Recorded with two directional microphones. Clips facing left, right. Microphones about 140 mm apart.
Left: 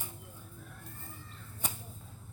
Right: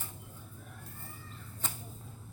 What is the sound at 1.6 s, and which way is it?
Whip, 15° left (ahead or behind).